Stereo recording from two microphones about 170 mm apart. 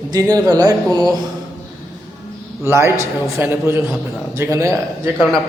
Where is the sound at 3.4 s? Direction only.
15° right (ahead or behind).